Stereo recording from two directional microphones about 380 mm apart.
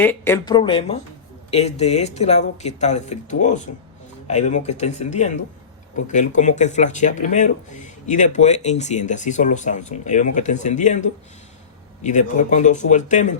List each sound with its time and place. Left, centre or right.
0.0 s speech: centre